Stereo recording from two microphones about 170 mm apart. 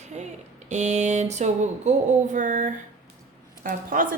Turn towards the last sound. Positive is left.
turn(degrees=-55)  # may be behind; listen again after turning